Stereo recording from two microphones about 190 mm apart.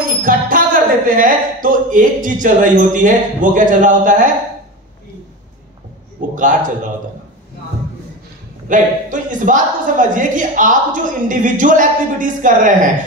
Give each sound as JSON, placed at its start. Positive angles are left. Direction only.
{"t": 0.2, "sound": "speech", "side_deg": -45}
{"t": 6.2, "sound": "a man's voice", "side_deg": -45}
{"t": 8.6, "sound": "a woman's voice", "side_deg": -45}